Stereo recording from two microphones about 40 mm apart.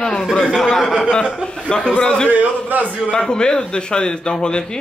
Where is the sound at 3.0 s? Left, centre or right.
Centre.